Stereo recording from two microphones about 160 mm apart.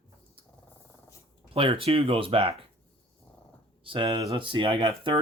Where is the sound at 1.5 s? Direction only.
35° right (ahead or behind).